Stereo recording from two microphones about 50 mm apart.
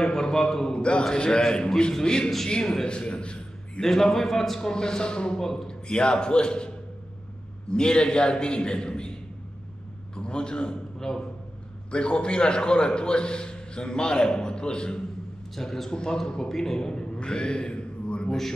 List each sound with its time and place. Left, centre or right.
0.0 s a man's voice: centre
3.8 s a man's voice: centre
7.7 s a man's voice: centre
10.1 s a man's voice: centre
15.5 s a man's voice: centre